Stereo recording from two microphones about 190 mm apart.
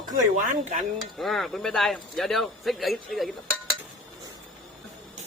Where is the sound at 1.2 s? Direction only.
Centre (ahead or behind).